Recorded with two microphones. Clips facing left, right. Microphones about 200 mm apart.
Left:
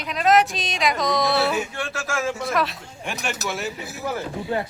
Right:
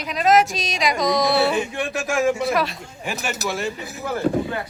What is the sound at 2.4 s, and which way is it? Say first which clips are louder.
Speech: right 3 dB; centre (ahead or behind).